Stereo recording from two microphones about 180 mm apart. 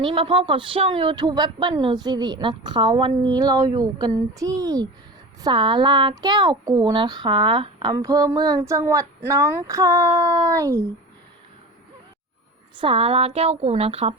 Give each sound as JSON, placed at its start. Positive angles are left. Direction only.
{"t": 0.0, "sound": "speech", "side_deg": -30}
{"t": 12.7, "sound": "a woman's voice", "side_deg": -30}